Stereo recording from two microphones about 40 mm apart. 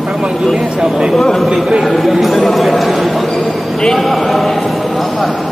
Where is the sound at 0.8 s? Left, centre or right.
Right.